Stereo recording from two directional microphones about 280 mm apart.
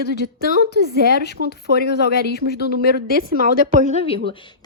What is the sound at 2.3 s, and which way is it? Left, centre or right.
Speech, left.